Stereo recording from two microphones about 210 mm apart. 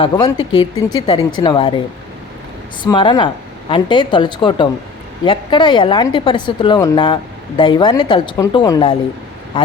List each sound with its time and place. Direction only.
0.0 s a woman's voice: 20° left (ahead or behind)
2.8 s a woman's voice: 20° left (ahead or behind)